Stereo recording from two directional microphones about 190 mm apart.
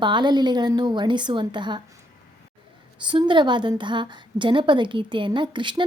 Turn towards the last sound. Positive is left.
turn(degrees=-25)  # may be behind; listen again after turning